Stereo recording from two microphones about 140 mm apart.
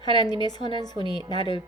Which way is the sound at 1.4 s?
35° left (ahead or behind).